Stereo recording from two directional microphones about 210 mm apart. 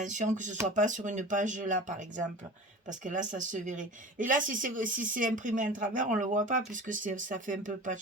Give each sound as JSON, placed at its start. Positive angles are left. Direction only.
{"t": 0.0, "sound": "speech", "side_deg": -35}